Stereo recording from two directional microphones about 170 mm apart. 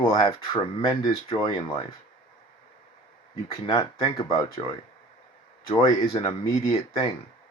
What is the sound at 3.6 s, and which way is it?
Speech, 30° left (ahead or behind).